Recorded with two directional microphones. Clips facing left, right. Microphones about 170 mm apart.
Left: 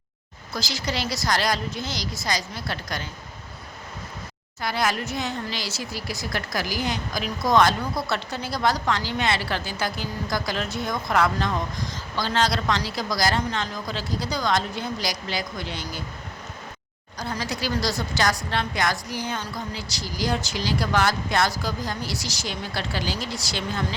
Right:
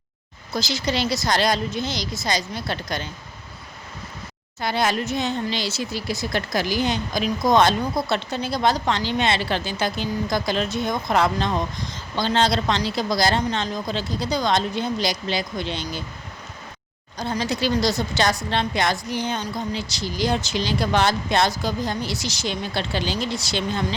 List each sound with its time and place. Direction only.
0.5 s speech: 20° right (ahead or behind)
4.6 s speech: 25° right (ahead or behind)
17.2 s speech: 25° right (ahead or behind)